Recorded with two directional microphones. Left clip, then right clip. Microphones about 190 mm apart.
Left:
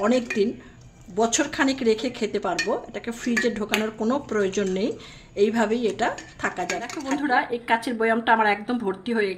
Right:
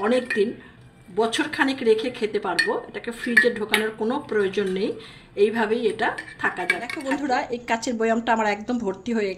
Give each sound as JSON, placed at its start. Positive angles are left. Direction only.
{"t": 0.0, "sound": "a woman's voice", "side_deg": 30}
{"t": 7.2, "sound": "speech", "side_deg": -15}